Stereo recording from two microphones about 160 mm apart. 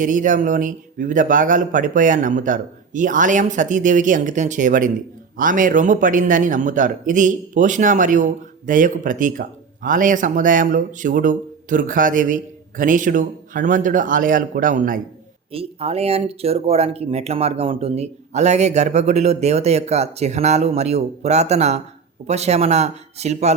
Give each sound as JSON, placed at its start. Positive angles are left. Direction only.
{"t": 0.0, "sound": "a man's voice", "side_deg": -55}
{"t": 15.5, "sound": "speech", "side_deg": -40}